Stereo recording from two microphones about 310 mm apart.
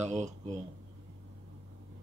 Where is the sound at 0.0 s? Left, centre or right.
Right.